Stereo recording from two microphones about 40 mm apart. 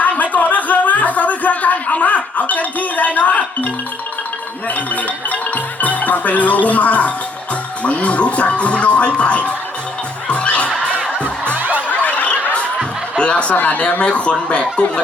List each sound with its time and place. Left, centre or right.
0.0 s a sound: left
4.7 s music: left
5.8 s speech: left
10.2 s music: left
11.5 s music: right
11.9 s snicker: left
13.1 s snicker: left
13.5 s speech: left
14.0 s speech: left